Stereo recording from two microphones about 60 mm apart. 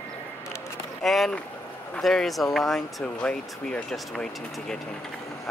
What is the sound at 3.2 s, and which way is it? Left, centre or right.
Speech, centre.